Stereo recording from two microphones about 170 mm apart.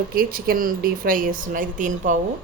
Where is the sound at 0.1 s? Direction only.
60° right (ahead or behind).